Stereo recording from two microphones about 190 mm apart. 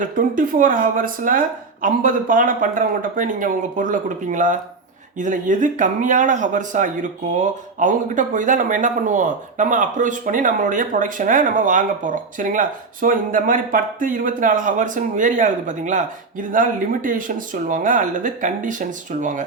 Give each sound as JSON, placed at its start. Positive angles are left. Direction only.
{"t": 0.2, "sound": "speech", "side_deg": -45}